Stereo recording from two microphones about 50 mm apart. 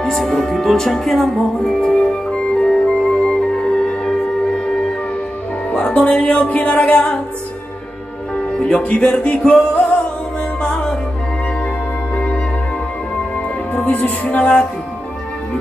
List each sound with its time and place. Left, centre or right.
0.0 s music: centre; by 7.2 s left
8.4 s music: centre
13.7 s music: left